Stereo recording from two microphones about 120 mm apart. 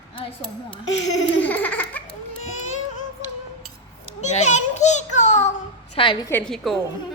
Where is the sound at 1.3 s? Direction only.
15° left (ahead or behind).